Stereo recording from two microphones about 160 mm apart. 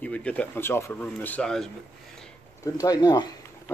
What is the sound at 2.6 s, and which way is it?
Speech, 20° left (ahead or behind).